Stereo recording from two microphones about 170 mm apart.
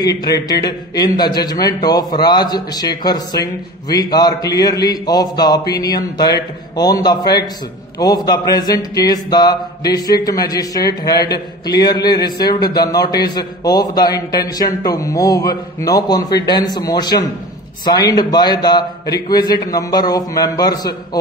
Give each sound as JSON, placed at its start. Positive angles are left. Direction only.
{"t": 0.0, "sound": "a man's voice", "side_deg": 20}